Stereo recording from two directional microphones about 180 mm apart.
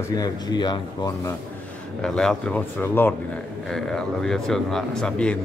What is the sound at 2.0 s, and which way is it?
A man's voice, 5° left (ahead or behind).